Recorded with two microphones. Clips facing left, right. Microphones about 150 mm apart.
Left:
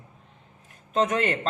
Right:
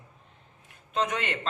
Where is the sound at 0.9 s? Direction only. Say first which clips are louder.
Left 6 dB; 45° left (ahead or behind).